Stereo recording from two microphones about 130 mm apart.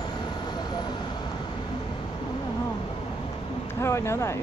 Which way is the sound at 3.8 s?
20° left (ahead or behind).